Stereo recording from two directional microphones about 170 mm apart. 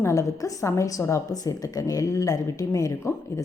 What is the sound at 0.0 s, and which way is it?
A woman's voice, 20° left (ahead or behind).